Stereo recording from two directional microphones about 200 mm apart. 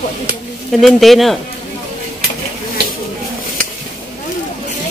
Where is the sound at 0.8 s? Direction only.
Centre (ahead or behind).